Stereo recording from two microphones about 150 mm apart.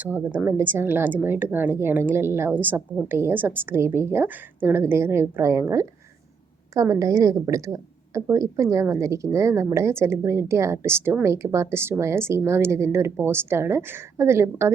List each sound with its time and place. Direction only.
0.0 s a woman's voice: 10° right (ahead or behind)